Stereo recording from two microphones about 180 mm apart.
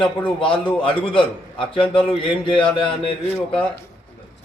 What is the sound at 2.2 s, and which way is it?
Speech, 30° left (ahead or behind).